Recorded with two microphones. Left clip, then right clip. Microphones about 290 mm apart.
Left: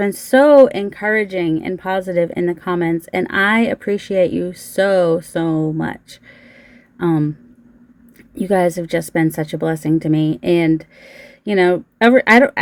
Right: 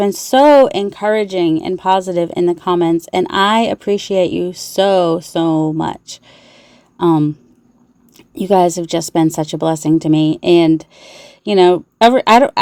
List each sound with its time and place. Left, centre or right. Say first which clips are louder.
0.3 s speech: right 1 dB; centre
7.0 s speech: right 5 dB; centre
8.4 s speech: right 4 dB; centre